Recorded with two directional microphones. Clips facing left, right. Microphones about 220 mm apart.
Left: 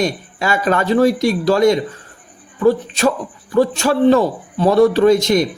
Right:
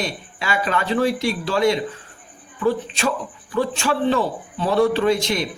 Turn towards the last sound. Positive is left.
turn(degrees=45)  # may be behind; listen again after turning